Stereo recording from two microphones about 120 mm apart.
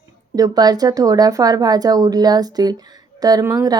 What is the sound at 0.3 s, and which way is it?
A woman's voice, 30° right (ahead or behind).